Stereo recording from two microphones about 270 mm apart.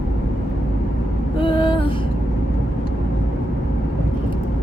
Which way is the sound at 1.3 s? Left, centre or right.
Centre.